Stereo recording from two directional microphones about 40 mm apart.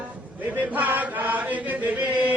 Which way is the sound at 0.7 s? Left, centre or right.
Right.